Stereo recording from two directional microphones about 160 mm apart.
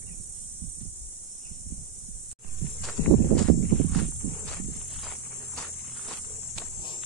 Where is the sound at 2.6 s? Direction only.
Centre (ahead or behind).